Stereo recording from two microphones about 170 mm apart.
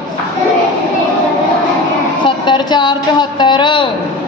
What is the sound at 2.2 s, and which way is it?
A woman's voice, 25° left (ahead or behind).